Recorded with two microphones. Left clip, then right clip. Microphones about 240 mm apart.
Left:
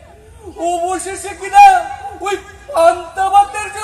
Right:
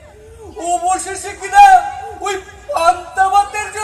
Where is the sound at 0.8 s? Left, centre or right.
Right.